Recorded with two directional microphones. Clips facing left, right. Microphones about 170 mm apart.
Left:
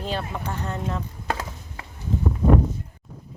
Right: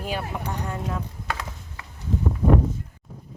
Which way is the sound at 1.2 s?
35° left (ahead or behind).